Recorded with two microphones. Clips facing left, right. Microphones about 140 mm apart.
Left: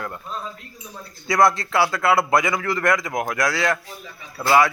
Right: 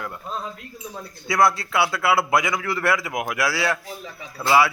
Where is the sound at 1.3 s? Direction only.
5° right (ahead or behind).